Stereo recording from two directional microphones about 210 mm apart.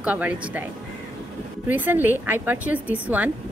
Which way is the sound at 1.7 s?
10° right (ahead or behind).